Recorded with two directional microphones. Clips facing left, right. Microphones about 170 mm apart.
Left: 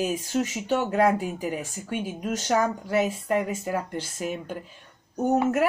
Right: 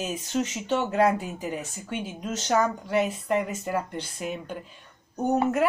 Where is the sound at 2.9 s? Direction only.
5° left (ahead or behind).